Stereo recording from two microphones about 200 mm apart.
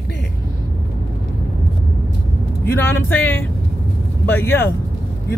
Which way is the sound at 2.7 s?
10° left (ahead or behind).